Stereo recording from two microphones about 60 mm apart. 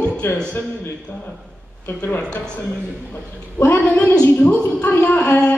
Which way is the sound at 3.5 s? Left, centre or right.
Left.